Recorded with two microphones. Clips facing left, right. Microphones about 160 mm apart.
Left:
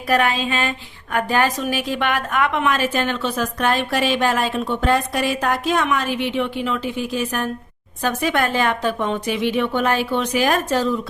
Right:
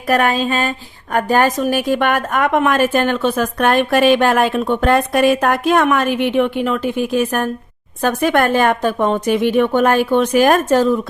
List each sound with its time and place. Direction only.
0.1 s a woman's voice: 45° right (ahead or behind)